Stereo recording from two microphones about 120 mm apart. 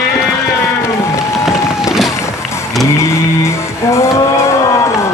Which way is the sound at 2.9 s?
20° left (ahead or behind).